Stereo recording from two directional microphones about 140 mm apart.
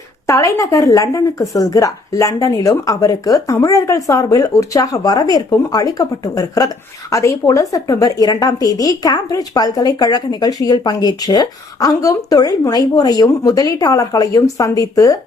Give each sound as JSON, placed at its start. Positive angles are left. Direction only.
{"t": 0.3, "sound": "a woman's voice", "side_deg": 20}